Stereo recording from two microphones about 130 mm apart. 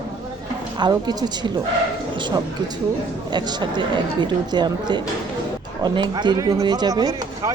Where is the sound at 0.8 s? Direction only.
30° right (ahead or behind).